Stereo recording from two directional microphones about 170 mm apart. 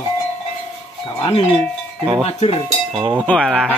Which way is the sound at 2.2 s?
35° left (ahead or behind).